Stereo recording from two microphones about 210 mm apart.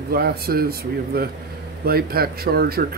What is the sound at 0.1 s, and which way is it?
Speech, 45° right (ahead or behind).